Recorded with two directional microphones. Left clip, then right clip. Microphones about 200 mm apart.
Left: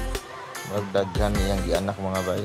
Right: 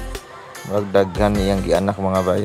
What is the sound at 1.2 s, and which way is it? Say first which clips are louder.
Speech: right 7 dB; 40° right (ahead or behind).